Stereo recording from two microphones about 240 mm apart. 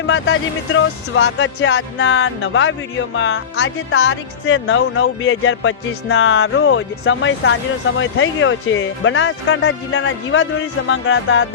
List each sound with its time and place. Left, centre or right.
0.1 s speech: left